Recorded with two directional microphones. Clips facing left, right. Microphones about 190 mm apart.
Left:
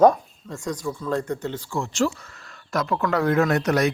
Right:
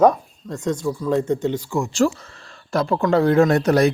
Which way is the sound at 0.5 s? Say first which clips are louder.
Right 6 dB; 25° right (ahead or behind).